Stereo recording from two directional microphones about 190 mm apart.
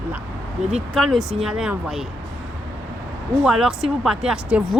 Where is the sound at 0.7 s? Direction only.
Centre (ahead or behind).